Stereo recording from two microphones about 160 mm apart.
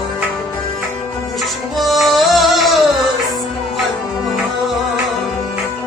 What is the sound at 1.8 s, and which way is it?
Music, centre (ahead or behind).